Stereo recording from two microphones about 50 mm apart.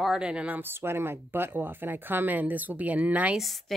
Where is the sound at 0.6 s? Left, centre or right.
Right.